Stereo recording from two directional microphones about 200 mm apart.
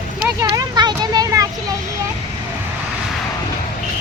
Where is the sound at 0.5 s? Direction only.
20° right (ahead or behind).